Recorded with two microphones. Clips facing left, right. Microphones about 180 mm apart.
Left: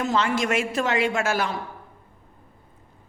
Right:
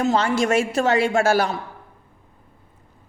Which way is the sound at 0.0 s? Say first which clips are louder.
Right 4 dB; 35° right (ahead or behind).